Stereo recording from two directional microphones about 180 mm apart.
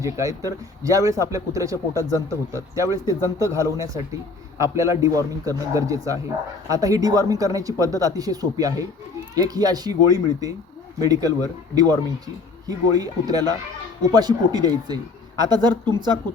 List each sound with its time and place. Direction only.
0.0 s speech: 15° right (ahead or behind)